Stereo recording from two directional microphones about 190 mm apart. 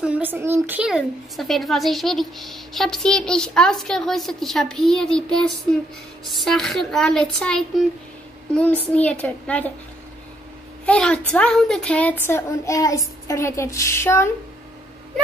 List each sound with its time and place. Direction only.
0.0 s a child's voice: 10° right (ahead or behind); by 9.7 s 5° left (ahead or behind)
10.9 s a child's voice: 5° left (ahead or behind)